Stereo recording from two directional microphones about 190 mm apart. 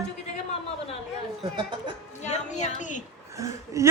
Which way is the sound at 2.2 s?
40° left (ahead or behind).